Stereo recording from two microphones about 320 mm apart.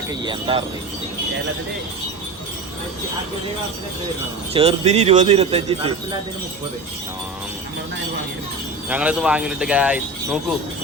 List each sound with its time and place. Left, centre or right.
0.3 s speech: centre
4.5 s speech: centre
8.9 s speech: centre